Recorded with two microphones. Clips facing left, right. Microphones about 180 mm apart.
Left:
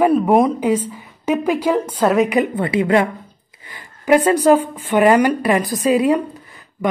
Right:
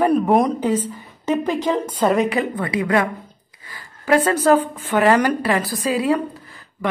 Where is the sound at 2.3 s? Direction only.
20° left (ahead or behind).